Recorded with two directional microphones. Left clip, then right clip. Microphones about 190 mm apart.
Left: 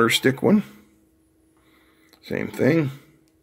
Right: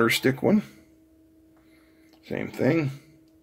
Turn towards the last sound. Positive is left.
turn(degrees=20)  # may be behind; listen again after turning